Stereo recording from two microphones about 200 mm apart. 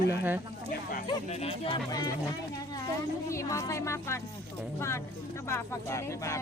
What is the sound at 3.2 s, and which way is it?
Speech, 15° left (ahead or behind).